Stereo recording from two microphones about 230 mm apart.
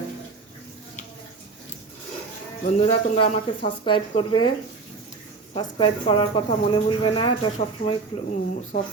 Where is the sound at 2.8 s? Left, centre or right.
Left.